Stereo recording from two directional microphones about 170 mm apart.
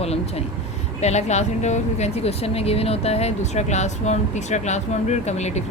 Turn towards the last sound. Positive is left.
turn(degrees=40)  # may be behind; listen again after turning